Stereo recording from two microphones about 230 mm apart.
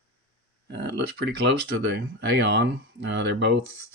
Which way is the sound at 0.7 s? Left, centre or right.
Right.